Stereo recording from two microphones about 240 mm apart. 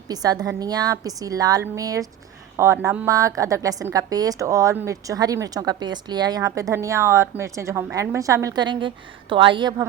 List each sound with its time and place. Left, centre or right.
0.1 s a woman's voice: centre